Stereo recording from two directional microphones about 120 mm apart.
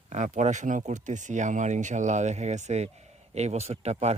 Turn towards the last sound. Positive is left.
turn(degrees=-65)  # may be behind; listen again after turning